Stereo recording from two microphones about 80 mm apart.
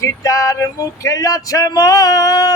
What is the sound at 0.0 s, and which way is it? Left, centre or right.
Speech, left.